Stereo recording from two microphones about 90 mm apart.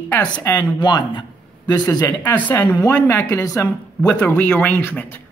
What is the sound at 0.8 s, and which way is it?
Speech, 55° left (ahead or behind).